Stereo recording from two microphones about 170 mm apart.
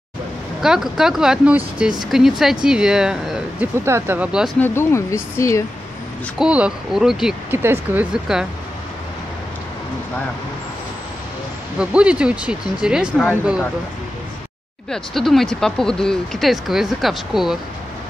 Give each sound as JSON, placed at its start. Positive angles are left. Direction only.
{"t": 0.6, "sound": "speech", "side_deg": 0}
{"t": 4.6, "sound": "speech", "side_deg": 15}
{"t": 6.3, "sound": "speech", "side_deg": -5}
{"t": 7.5, "sound": "speech", "side_deg": -15}
{"t": 11.8, "sound": "speech", "side_deg": -5}
{"t": 14.9, "sound": "speech", "side_deg": 0}